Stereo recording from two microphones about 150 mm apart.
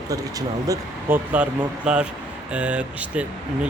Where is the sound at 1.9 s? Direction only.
5° right (ahead or behind).